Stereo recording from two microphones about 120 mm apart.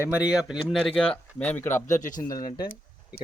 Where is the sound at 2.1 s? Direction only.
30° left (ahead or behind).